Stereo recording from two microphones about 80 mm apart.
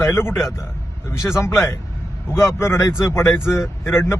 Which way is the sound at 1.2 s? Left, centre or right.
Left.